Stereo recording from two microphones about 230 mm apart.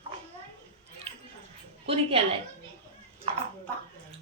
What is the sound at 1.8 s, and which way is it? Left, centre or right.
Speech, right.